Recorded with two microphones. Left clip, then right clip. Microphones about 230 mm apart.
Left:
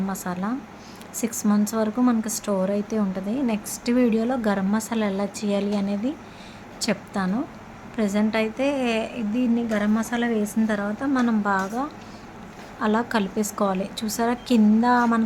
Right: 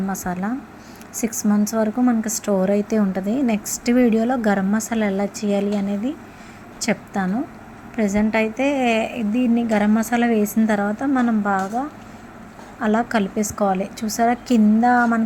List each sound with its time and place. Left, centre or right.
0.1 s a woman's voice: centre